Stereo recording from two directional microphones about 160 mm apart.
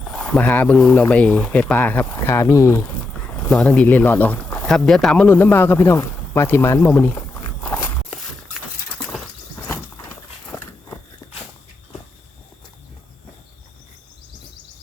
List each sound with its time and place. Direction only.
0.1 s speech: 5° left (ahead or behind)
9.6 s a sound: 15° left (ahead or behind)
10.5 s walk: 20° left (ahead or behind)